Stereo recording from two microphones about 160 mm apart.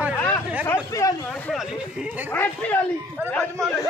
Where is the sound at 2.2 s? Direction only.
10° left (ahead or behind).